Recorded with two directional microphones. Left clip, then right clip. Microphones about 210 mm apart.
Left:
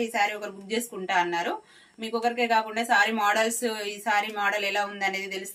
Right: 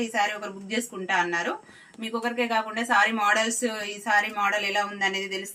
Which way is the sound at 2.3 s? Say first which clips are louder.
Left 1 dB; 15° left (ahead or behind).